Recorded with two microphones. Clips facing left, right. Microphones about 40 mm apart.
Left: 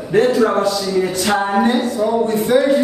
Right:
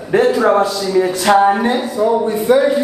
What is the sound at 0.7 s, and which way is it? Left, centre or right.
A man's voice, centre.